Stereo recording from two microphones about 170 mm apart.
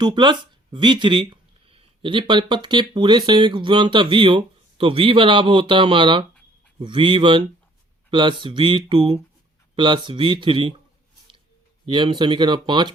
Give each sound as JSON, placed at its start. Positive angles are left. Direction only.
{"t": 0.0, "sound": "speech", "side_deg": -25}
{"t": 11.9, "sound": "speech", "side_deg": -30}